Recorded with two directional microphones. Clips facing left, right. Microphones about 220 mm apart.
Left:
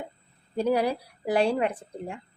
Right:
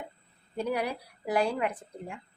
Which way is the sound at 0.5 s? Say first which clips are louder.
Left 6 dB; 30° left (ahead or behind).